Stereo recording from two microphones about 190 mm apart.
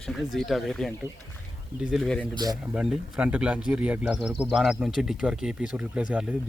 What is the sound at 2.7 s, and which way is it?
Speech, 5° right (ahead or behind).